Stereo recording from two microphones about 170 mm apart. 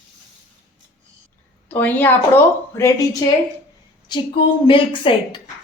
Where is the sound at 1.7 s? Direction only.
10° left (ahead or behind).